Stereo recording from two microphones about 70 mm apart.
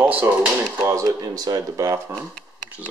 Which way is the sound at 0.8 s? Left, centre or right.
Right.